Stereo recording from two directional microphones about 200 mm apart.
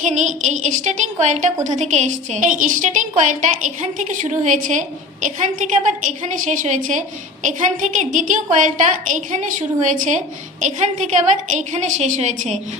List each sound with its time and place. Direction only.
0.0 s a woman's voice: 35° right (ahead or behind)